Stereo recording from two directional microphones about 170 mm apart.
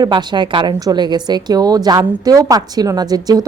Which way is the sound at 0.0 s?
25° right (ahead or behind).